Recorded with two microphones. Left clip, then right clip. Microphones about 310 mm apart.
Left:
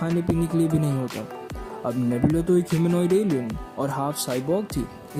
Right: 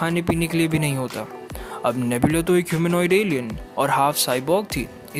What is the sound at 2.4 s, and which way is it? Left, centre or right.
Speech, right.